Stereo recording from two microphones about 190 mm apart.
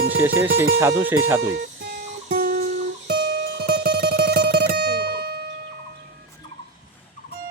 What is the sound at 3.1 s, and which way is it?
Music, 55° right (ahead or behind).